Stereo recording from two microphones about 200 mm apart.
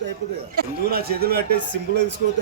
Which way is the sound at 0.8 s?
50° right (ahead or behind).